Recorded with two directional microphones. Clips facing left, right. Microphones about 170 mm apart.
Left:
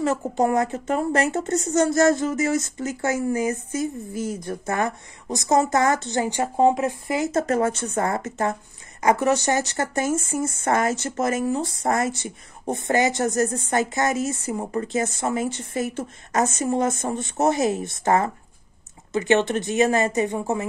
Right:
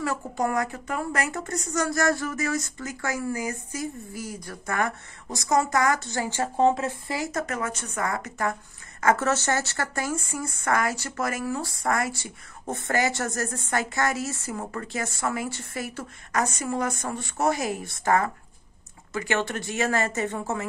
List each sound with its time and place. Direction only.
0.0 s speech: 25° left (ahead or behind)